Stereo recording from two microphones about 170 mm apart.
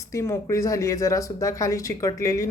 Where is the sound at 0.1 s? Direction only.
15° left (ahead or behind).